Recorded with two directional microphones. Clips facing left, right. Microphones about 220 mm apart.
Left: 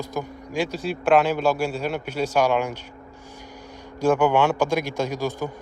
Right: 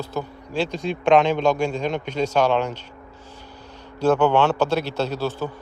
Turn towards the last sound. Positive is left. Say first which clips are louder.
# right 1 dB
turn(degrees=10)  # may be behind; listen again after turning